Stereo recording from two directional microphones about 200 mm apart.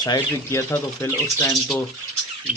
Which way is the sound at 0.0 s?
20° left (ahead or behind).